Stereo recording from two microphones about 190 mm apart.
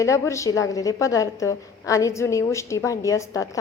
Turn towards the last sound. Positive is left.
turn(degrees=15)  # may be behind; listen again after turning